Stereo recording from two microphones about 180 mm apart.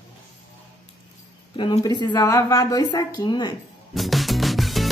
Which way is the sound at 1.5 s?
25° left (ahead or behind).